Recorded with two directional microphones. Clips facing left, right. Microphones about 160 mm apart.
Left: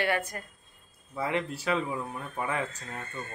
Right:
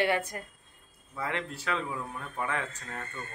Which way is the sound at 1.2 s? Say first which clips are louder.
Left 4 dB; 15° left (ahead or behind).